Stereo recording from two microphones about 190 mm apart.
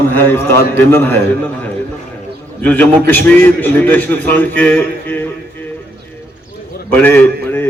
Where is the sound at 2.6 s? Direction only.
10° left (ahead or behind).